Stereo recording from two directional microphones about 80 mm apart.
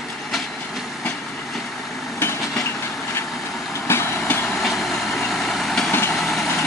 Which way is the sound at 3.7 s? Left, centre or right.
Left.